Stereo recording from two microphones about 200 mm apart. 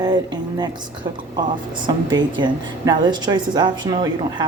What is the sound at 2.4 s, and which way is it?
A woman's voice, 20° right (ahead or behind).